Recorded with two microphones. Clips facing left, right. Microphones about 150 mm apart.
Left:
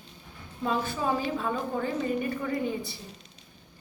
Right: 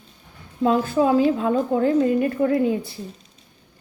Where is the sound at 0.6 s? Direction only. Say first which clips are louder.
Right 10 dB; 80° right.